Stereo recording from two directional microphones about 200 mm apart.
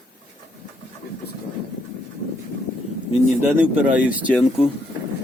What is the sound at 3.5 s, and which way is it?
Speech, 5° right (ahead or behind).